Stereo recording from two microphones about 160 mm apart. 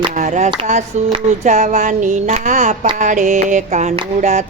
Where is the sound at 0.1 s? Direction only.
45° right (ahead or behind).